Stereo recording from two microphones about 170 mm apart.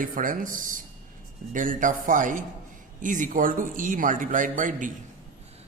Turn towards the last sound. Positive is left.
turn(degrees=-50)  # may be behind; listen again after turning